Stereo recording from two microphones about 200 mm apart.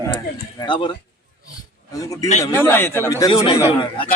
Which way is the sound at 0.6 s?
25° left (ahead or behind).